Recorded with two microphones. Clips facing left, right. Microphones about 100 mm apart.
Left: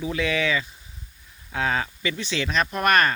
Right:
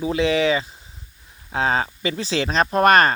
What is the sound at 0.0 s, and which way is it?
Speech, 30° right (ahead or behind).